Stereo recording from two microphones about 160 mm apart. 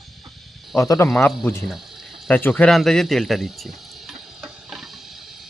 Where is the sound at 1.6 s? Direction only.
Centre (ahead or behind).